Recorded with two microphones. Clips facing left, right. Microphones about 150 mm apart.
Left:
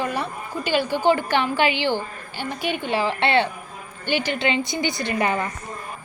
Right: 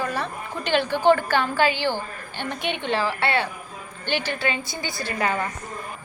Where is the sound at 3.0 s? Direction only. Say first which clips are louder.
Left 6 dB; 25° left (ahead or behind).